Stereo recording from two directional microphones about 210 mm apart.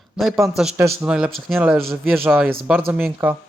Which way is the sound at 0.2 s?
Centre (ahead or behind).